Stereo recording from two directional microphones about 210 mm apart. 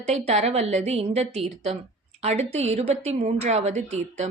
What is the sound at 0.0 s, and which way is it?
A woman's voice, 30° right (ahead or behind).